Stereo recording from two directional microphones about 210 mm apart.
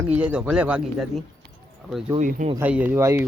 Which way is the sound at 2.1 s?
35° right (ahead or behind).